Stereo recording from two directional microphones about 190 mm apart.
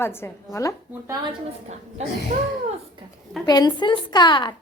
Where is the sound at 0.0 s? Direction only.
10° left (ahead or behind).